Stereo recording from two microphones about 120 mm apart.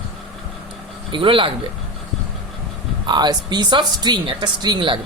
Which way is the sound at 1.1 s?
45° right (ahead or behind).